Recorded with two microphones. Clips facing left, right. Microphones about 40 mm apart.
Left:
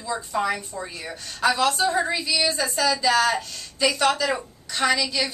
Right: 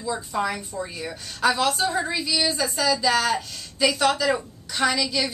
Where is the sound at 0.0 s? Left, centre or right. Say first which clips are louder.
Even; centre.